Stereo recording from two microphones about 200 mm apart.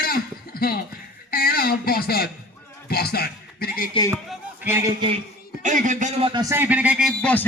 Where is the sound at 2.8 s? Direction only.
50° left (ahead or behind).